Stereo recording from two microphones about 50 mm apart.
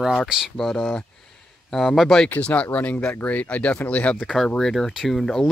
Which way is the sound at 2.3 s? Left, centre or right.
Left.